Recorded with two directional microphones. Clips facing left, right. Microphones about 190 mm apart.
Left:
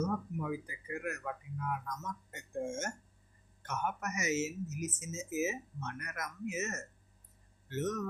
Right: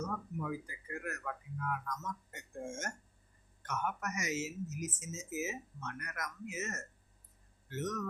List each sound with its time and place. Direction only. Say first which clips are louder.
0.3 s speech: left 2 dB; 10° left (ahead or behind); by 8.0 s 25° left (ahead or behind)